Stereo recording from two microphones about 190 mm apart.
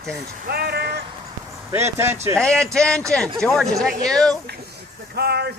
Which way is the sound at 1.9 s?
15° right (ahead or behind).